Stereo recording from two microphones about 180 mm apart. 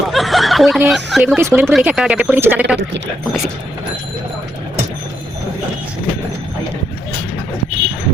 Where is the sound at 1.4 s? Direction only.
15° right (ahead or behind).